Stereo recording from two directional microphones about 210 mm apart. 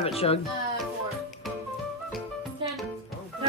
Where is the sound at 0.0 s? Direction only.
30° left (ahead or behind).